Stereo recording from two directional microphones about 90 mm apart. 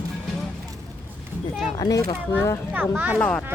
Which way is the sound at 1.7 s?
55° left (ahead or behind).